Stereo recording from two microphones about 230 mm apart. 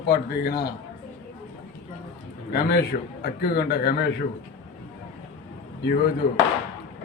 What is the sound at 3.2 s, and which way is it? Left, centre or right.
Speech, left.